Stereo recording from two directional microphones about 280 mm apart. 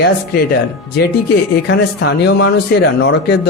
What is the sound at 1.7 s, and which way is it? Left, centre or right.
A man's voice, left.